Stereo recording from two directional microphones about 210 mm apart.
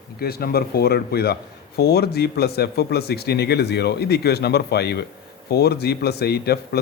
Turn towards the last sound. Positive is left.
turn(degrees=50)  # may be behind; listen again after turning